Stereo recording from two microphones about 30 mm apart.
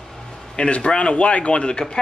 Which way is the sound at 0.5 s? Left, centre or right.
Left.